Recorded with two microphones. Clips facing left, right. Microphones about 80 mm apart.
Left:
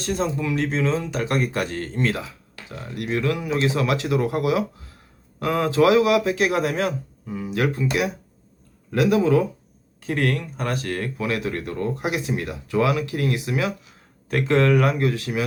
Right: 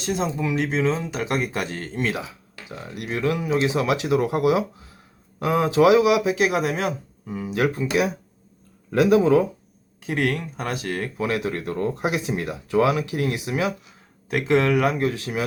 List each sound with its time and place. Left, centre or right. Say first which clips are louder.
0.0 s speech: even; centre